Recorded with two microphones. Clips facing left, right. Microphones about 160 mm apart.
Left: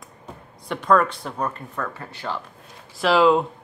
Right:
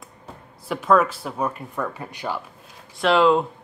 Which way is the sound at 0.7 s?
5° right (ahead or behind).